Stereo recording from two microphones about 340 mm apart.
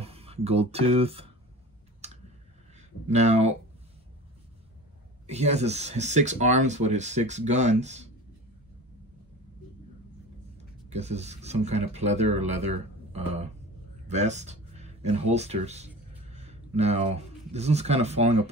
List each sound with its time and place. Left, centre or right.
0.0 s speech: centre
2.0 s a sound: centre
3.1 s speech: centre
5.2 s speech: centre
10.9 s speech: centre